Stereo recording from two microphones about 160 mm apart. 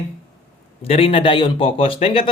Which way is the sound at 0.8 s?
40° left (ahead or behind).